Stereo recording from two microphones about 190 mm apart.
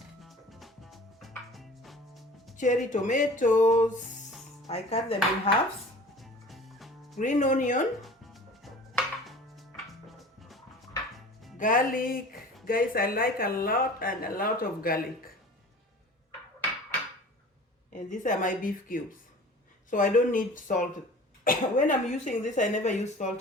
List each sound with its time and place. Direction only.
0.2 s music: centre (ahead or behind)
2.6 s speech: 40° left (ahead or behind)
6.1 s music: centre (ahead or behind)
7.2 s speech: 40° left (ahead or behind)
8.0 s music: centre (ahead or behind)
11.5 s speech: 45° left (ahead or behind)
17.9 s speech: 40° left (ahead or behind)